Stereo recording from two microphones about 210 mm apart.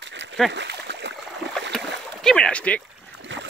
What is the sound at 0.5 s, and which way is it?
Splash, 55° right (ahead or behind).